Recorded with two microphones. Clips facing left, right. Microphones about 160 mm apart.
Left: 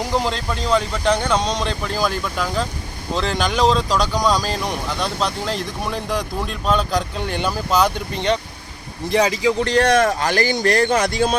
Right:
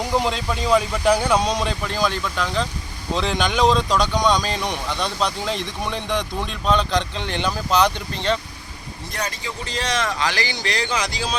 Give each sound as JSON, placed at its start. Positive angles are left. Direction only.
{"t": 0.0, "sound": "speech", "side_deg": 0}
{"t": 9.1, "sound": "a man's voice", "side_deg": 90}